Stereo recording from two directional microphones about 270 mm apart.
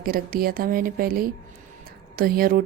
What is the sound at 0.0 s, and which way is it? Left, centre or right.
A woman's voice, right.